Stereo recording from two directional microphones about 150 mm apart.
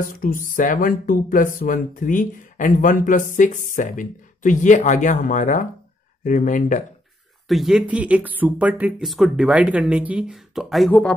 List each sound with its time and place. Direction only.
0.0 s speech: 65° left (ahead or behind)
7.4 s speech: centre (ahead or behind)
10.9 s speech: 10° left (ahead or behind)